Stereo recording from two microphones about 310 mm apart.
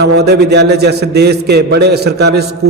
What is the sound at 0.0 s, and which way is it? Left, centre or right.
A man's voice, right.